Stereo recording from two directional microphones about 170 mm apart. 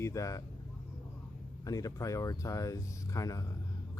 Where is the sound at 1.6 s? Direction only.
20° left (ahead or behind).